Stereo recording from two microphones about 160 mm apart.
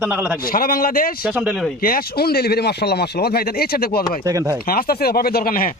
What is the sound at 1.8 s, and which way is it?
Speech, 65° left (ahead or behind).